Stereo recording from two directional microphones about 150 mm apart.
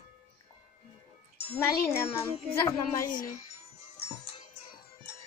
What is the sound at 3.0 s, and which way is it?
Speech, 60° left (ahead or behind).